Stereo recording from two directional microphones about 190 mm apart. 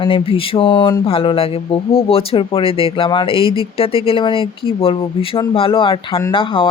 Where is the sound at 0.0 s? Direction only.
30° left (ahead or behind).